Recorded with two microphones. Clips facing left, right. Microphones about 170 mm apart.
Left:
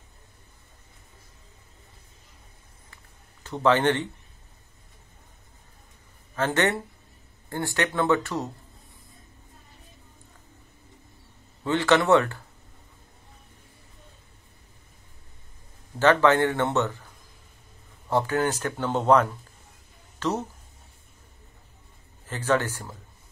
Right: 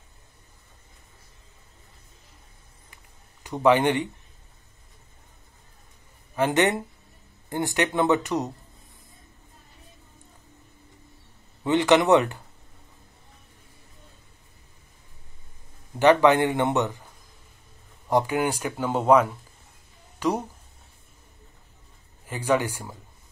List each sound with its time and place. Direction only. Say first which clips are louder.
3.4 s speech: right 2 dB; 15° right (ahead or behind)
6.3 s speech: right 2 dB; 15° right (ahead or behind)
11.6 s speech: right 2 dB; 20° right (ahead or behind)
16.0 s speech: right 2 dB; 15° right (ahead or behind)
18.1 s speech: right 1 dB; 15° right (ahead or behind)
22.2 s speech: right 1 dB; 10° right (ahead or behind)